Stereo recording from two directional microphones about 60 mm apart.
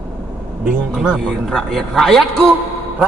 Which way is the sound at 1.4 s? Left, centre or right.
Centre.